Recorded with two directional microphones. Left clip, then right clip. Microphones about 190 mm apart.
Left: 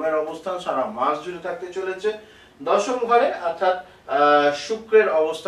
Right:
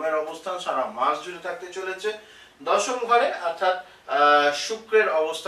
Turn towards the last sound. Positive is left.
turn(degrees=10)  # may be behind; listen again after turning